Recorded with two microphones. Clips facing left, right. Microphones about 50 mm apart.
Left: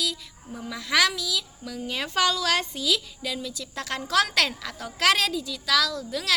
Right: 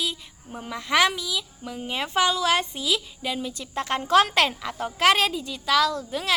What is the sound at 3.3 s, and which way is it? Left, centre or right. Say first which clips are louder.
Speech: right 4 dB; right.